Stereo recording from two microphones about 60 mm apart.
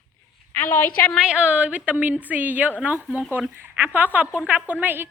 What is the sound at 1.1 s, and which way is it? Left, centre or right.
A woman's voice, centre.